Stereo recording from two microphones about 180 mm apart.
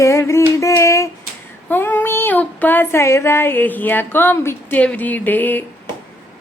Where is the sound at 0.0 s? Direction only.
15° left (ahead or behind).